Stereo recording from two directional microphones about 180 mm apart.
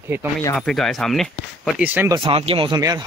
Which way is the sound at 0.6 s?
Centre (ahead or behind).